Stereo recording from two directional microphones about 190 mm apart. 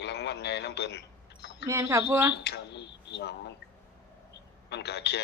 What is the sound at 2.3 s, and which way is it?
Speech, 65° left (ahead or behind).